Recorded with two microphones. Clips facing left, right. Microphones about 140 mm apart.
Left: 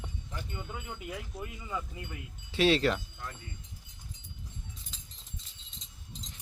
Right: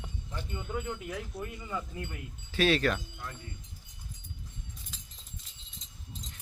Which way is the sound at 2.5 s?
25° left (ahead or behind).